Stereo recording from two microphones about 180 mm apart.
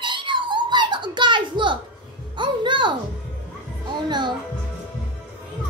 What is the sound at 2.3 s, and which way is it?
Music, 25° right (ahead or behind).